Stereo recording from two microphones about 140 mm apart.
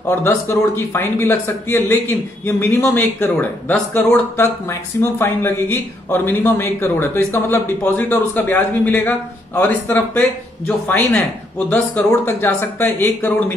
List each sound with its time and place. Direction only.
0.1 s a man's voice: 15° left (ahead or behind)